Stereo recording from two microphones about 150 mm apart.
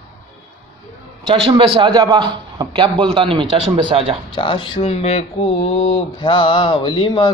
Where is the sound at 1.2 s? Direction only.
30° right (ahead or behind).